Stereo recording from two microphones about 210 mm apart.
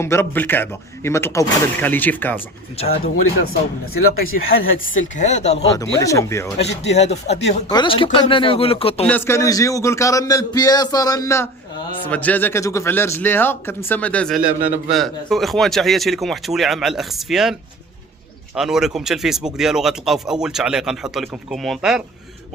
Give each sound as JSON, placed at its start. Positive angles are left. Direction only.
{"t": 0.0, "sound": "speech", "side_deg": 10}
{"t": 2.8, "sound": "speech", "side_deg": 30}
{"t": 3.4, "sound": "speech", "side_deg": 45}
{"t": 4.4, "sound": "speech", "side_deg": 75}
{"t": 5.1, "sound": "speech", "side_deg": 35}
{"t": 5.7, "sound": "speech", "side_deg": 15}
{"t": 6.8, "sound": "speech", "side_deg": 30}
{"t": 9.0, "sound": "speech", "side_deg": 10}